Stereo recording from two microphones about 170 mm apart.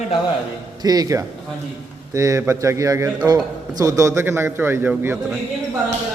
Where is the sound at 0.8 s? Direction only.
20° right (ahead or behind).